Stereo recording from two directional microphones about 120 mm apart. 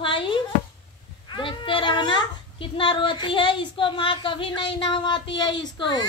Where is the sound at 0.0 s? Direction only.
45° left (ahead or behind).